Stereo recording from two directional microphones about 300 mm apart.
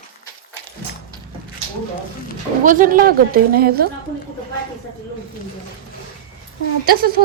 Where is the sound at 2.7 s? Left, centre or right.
Right.